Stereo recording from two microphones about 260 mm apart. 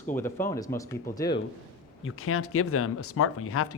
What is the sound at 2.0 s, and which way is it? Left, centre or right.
A man's voice, left.